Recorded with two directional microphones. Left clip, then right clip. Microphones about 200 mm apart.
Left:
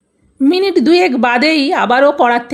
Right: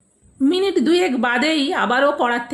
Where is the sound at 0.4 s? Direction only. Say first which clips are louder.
Left 6 dB; 45° left (ahead or behind).